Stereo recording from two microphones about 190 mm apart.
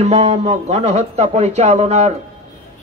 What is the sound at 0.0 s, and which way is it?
A man's voice, 35° right (ahead or behind).